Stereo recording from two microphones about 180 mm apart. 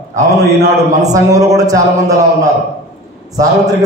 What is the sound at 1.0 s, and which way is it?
Speech, 20° right (ahead or behind).